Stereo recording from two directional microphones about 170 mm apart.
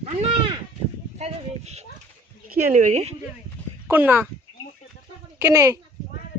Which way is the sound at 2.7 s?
45° right (ahead or behind).